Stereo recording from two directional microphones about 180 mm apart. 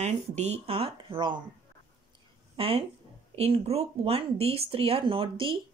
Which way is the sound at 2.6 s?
35° right (ahead or behind).